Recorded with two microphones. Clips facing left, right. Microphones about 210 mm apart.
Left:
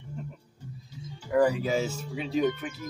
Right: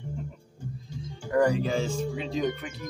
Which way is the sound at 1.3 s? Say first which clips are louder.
Even; 5° left (ahead or behind).